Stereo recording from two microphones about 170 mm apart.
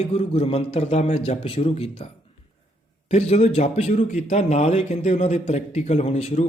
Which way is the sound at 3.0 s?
40° left (ahead or behind).